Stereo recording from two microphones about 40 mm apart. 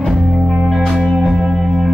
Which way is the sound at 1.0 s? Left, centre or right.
Centre.